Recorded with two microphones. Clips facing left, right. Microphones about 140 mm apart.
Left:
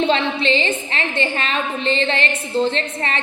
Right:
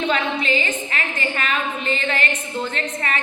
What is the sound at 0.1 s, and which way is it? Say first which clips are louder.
A woman's voice: left 3 dB; 30° left (ahead or behind).